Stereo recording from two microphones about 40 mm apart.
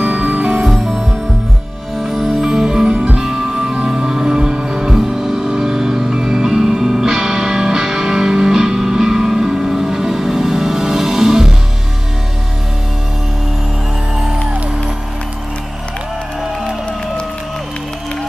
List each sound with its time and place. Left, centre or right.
0.0 s music: right
0.7 s music: centre